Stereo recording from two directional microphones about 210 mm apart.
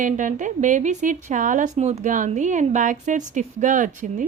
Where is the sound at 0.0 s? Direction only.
35° right (ahead or behind).